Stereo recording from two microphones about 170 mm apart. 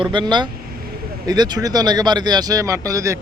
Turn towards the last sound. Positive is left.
turn(degrees=-20)  # may be behind; listen again after turning